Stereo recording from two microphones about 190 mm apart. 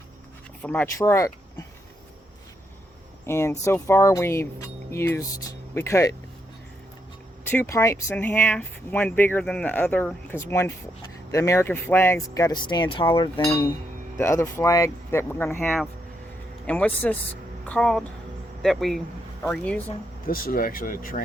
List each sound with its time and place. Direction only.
0.6 s speech: 10° left (ahead or behind)
3.2 s speech: 15° left (ahead or behind)
7.4 s speech: 10° left (ahead or behind); by 13.5 s 25° left (ahead or behind)
14.2 s speech: 15° left (ahead or behind)
20.2 s speech: 50° left (ahead or behind)